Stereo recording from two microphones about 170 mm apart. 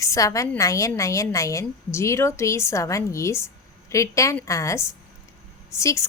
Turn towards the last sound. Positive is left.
turn(degrees=15)  # may be behind; listen again after turning